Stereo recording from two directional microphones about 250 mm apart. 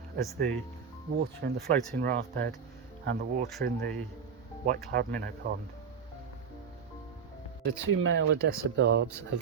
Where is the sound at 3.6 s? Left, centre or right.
Right.